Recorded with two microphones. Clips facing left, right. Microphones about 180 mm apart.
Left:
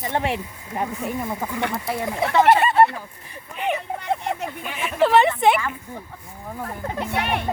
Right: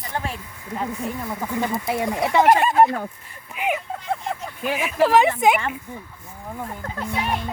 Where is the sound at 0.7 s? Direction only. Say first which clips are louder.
Left 1 dB; 20° left (ahead or behind).